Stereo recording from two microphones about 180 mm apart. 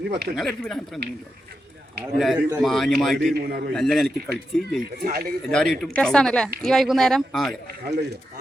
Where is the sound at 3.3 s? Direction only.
60° right (ahead or behind).